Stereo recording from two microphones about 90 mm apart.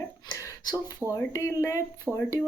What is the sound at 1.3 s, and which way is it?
Speech, 35° left (ahead or behind).